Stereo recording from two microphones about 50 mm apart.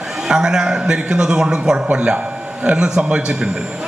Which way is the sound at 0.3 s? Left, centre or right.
Centre.